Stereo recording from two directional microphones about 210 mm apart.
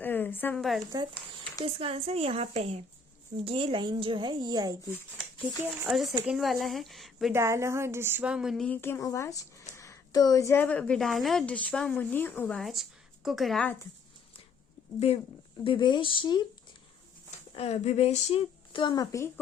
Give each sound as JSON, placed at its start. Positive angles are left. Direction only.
{"t": 0.0, "sound": "speech", "side_deg": 10}
{"t": 1.6, "sound": "a woman's voice", "side_deg": -25}
{"t": 5.8, "sound": "speech", "side_deg": 0}
{"t": 7.3, "sound": "speech", "side_deg": -15}
{"t": 14.9, "sound": "speech", "side_deg": 30}
{"t": 17.5, "sound": "speech", "side_deg": 30}